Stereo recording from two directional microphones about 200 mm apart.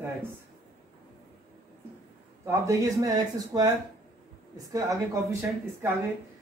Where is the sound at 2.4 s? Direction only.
15° right (ahead or behind).